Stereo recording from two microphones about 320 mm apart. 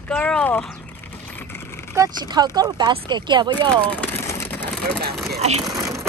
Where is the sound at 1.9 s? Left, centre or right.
Centre.